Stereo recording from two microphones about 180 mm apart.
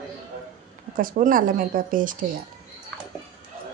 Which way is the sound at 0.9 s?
50° right (ahead or behind).